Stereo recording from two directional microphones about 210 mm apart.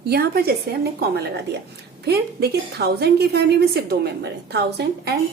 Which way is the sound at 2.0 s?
50° right (ahead or behind).